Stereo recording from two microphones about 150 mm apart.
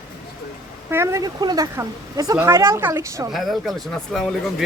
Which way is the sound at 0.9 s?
15° right (ahead or behind).